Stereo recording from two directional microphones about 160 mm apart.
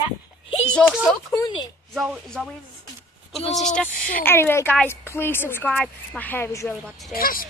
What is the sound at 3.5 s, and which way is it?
Speech, 5° left (ahead or behind).